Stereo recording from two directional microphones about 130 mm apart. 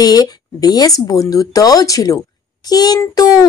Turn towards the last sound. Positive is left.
turn(degrees=30)  # may be behind; listen again after turning